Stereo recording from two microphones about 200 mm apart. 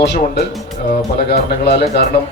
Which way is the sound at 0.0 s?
55° left (ahead or behind).